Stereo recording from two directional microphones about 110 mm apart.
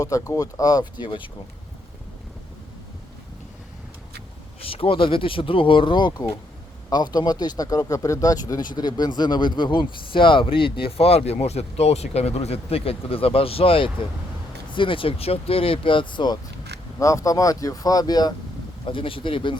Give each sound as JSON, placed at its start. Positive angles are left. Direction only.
{"t": 0.0, "sound": "speech", "side_deg": 30}
{"t": 4.6, "sound": "speech", "side_deg": 60}
{"t": 17.0, "sound": "speech", "side_deg": 30}
{"t": 18.9, "sound": "speech", "side_deg": 50}